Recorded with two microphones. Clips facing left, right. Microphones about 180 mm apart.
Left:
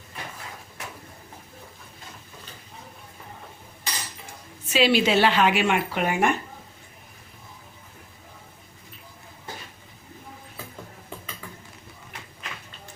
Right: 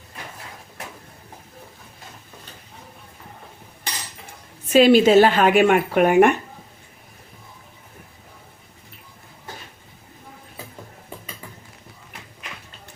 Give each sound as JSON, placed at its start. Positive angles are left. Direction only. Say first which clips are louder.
{"t": 4.7, "sound": "speech", "louder": "right 8 dB", "side_deg": -50}